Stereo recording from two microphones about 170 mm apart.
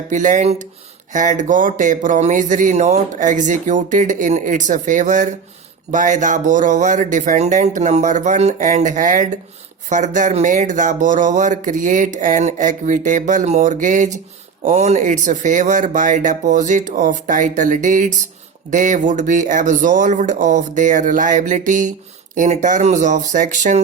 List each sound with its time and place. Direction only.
0.1 s speech: 45° right (ahead or behind)